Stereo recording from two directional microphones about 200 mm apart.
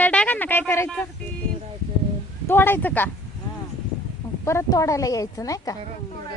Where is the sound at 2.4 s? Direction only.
10° left (ahead or behind).